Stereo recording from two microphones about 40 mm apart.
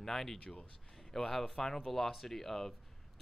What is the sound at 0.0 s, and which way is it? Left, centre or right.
Speech, centre.